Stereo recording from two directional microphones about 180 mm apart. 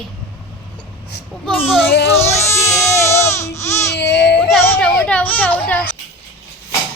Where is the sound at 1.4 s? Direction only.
10° left (ahead or behind).